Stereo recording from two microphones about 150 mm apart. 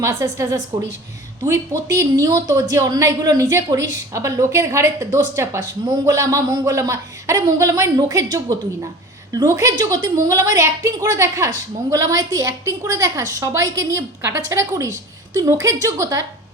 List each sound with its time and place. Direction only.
0.0 s a woman's voice: 20° right (ahead or behind)